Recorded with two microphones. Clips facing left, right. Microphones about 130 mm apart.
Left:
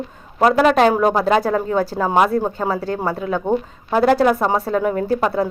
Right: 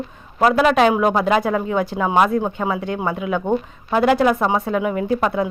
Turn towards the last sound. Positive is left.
turn(degrees=35)  # may be behind; listen again after turning